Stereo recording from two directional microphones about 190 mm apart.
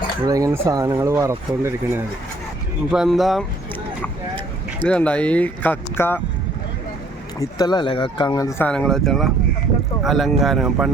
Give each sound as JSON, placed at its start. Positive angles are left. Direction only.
{"t": 0.3, "sound": "speech", "side_deg": -15}
{"t": 2.9, "sound": "a man's voice", "side_deg": 0}
{"t": 4.8, "sound": "speech", "side_deg": 5}
{"t": 7.3, "sound": "a man's voice", "side_deg": 20}